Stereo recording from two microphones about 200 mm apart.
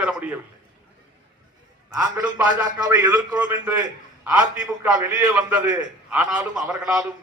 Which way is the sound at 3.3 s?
5° right (ahead or behind).